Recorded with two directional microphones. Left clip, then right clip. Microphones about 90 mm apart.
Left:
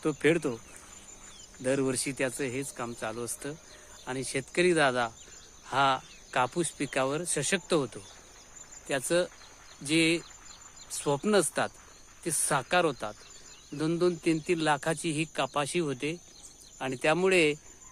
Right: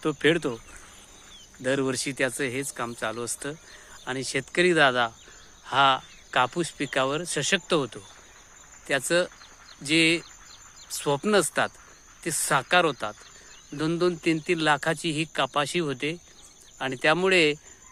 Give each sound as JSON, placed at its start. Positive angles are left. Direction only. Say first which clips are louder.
{"t": 0.0, "sound": "speech", "louder": "right 3 dB", "side_deg": -50}
{"t": 1.6, "sound": "speech", "louder": "right 3 dB", "side_deg": -50}
{"t": 2.1, "sound": "speech", "louder": "right 5 dB", "side_deg": -90}
{"t": 4.0, "sound": "speech", "louder": "right 4 dB", "side_deg": -70}
{"t": 5.6, "sound": "speech", "louder": "right 5 dB", "side_deg": -35}
{"t": 8.9, "sound": "speech", "louder": "right 4 dB", "side_deg": -70}